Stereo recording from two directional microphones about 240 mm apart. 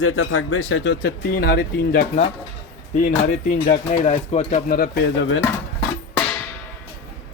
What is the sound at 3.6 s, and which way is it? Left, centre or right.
Speech, left.